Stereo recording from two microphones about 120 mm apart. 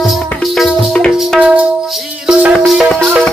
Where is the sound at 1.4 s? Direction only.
10° right (ahead or behind).